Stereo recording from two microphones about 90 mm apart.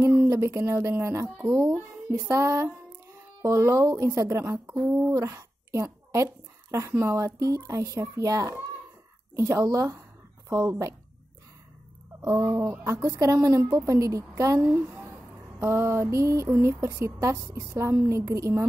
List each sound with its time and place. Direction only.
0.3 s a woman's voice: 35° right (ahead or behind)
12.3 s speech: 30° right (ahead or behind)
14.6 s speech: 20° right (ahead or behind)
15.6 s speech: 30° right (ahead or behind)